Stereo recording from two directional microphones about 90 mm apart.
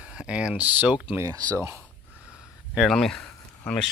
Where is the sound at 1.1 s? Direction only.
35° right (ahead or behind).